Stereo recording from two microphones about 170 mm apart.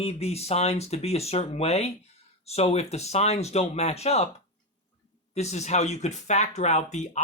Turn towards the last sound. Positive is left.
turn(degrees=40)  # may be behind; listen again after turning